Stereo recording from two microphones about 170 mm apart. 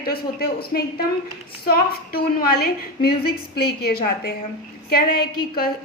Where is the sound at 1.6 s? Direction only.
60° left (ahead or behind).